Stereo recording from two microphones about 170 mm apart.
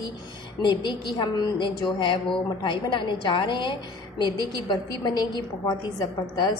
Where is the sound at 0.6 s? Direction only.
25° left (ahead or behind).